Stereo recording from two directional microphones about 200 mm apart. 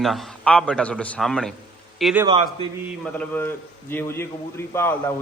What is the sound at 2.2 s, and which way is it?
Speech, 25° right (ahead or behind).